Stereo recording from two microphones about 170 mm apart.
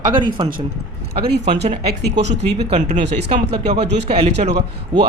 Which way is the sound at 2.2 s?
40° right (ahead or behind).